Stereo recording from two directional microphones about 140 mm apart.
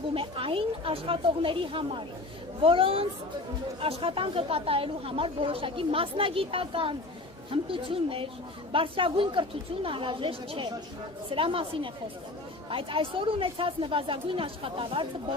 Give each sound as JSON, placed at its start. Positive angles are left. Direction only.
{"t": 0.1, "sound": "a woman's voice", "side_deg": -40}